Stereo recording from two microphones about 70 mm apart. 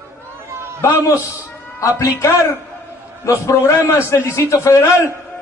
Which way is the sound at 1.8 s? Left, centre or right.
Left.